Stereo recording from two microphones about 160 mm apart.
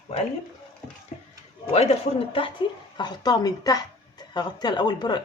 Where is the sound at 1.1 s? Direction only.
45° left (ahead or behind).